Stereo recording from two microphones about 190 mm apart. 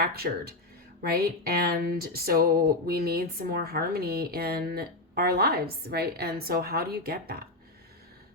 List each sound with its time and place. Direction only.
0.0 s speech: 55° right (ahead or behind)